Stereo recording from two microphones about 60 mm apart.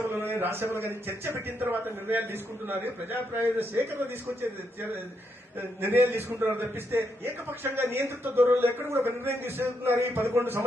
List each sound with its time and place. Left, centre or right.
0.0 s a man's voice: right
6.1 s a man's voice: right